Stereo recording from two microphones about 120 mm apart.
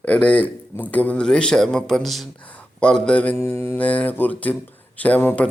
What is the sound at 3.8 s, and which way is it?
Speech, 15° left (ahead or behind).